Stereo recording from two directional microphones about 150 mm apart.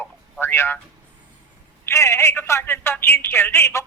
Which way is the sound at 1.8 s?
20° left (ahead or behind).